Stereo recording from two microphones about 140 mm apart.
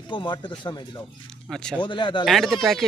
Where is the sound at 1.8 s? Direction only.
35° left (ahead or behind).